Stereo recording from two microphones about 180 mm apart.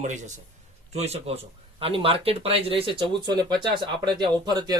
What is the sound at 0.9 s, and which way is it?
A man's voice, 35° right (ahead or behind).